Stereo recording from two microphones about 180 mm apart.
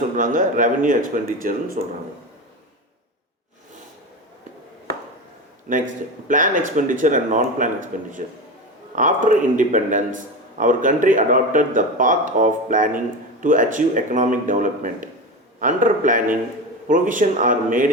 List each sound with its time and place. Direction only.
0.2 s speech: 50° right (ahead or behind)
6.2 s speech: 45° right (ahead or behind)